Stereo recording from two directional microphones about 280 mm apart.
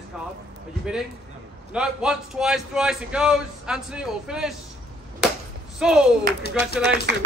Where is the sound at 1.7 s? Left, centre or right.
Centre.